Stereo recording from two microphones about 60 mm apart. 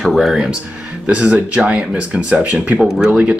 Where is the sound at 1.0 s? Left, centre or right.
Centre.